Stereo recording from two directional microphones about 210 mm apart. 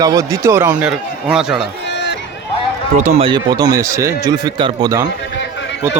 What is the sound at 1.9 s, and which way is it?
Run, 55° left (ahead or behind).